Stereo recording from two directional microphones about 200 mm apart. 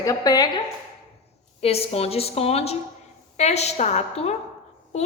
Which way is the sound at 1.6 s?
30° left (ahead or behind).